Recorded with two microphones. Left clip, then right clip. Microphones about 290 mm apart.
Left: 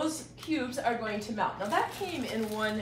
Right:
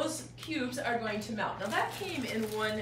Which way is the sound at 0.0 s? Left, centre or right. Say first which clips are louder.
Left 2 dB; centre.